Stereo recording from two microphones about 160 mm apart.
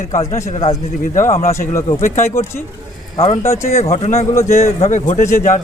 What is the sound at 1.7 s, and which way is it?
Speech, 20° left (ahead or behind).